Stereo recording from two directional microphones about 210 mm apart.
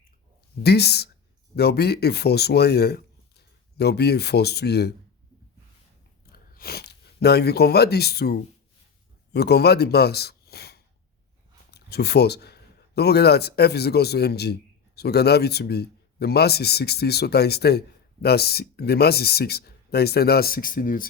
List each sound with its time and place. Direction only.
0.6 s a man's voice: 50° left (ahead or behind)
6.3 s a man's voice: 45° left (ahead or behind)